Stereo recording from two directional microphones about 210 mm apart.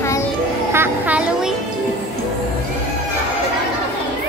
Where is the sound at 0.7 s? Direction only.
10° right (ahead or behind).